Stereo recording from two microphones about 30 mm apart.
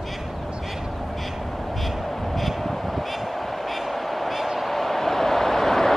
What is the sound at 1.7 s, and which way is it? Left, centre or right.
Vehicle, centre.